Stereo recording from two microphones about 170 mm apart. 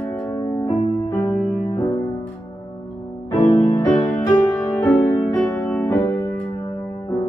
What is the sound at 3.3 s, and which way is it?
Music, 20° left (ahead or behind).